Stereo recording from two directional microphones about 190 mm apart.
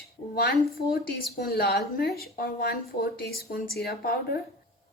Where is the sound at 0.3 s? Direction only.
55° left (ahead or behind).